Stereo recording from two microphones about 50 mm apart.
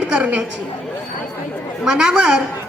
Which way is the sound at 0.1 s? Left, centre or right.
Right.